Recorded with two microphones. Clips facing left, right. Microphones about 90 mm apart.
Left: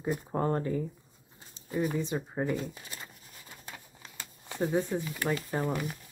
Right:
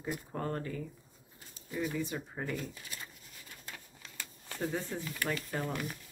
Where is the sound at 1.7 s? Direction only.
45° left (ahead or behind).